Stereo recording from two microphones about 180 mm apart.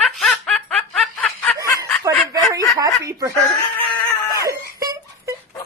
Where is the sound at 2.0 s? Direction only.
20° right (ahead or behind).